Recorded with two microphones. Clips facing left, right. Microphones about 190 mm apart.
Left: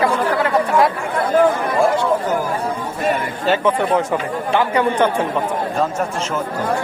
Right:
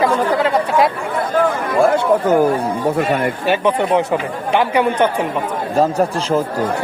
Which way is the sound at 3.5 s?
20° right (ahead or behind).